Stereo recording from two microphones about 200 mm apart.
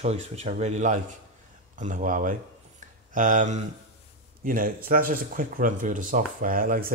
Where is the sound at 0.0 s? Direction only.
35° right (ahead or behind).